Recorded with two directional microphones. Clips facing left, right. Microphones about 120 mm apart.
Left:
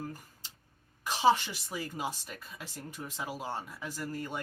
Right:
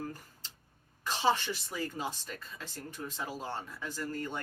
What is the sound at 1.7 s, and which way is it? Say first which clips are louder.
Speech: left 3 dB; 10° left (ahead or behind).